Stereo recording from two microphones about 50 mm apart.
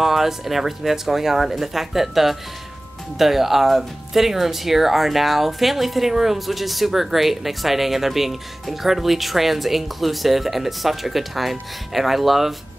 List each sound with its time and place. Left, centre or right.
0.0 s speech: centre